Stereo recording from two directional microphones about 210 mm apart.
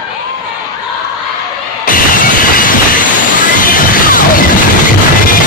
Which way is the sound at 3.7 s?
40° left (ahead or behind).